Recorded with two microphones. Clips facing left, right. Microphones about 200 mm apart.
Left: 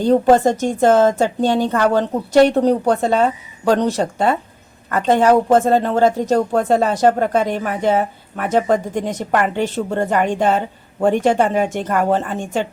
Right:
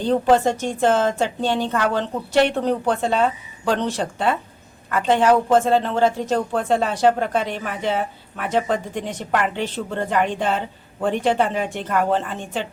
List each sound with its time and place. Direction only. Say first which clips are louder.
0.0 s a woman's voice: left 4 dB; 45° left (ahead or behind)